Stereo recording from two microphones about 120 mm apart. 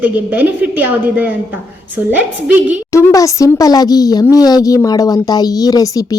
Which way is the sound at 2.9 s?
25° left (ahead or behind).